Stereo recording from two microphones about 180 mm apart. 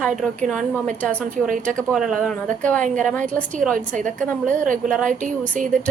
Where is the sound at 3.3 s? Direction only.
45° right (ahead or behind).